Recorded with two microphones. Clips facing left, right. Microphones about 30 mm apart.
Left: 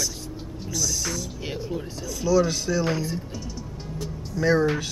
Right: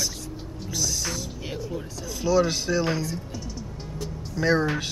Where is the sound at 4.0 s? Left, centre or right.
Centre.